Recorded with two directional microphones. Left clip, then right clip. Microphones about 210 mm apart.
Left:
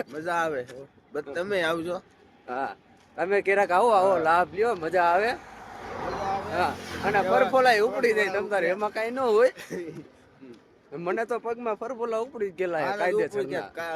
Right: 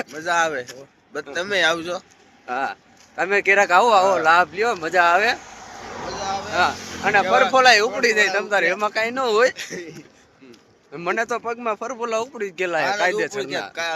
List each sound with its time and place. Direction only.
0.1 s speech: 10° left (ahead or behind)
2.5 s speech: 10° right (ahead or behind)
5.4 s vehicle: 35° right (ahead or behind)
6.1 s a sound: 30° left (ahead or behind)
6.5 s speech: 5° right (ahead or behind)
9.6 s speech: 30° left (ahead or behind)
10.9 s speech: 5° right (ahead or behind)
13.8 s speech: 15° left (ahead or behind)